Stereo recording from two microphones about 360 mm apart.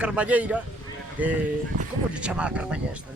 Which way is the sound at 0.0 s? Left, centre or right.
Centre.